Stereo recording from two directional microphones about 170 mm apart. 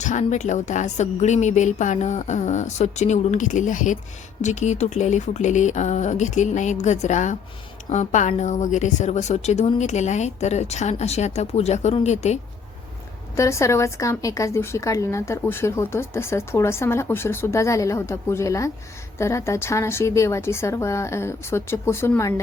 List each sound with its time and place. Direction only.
0.0 s a woman's voice: 45° left (ahead or behind)
13.3 s speech: 15° left (ahead or behind)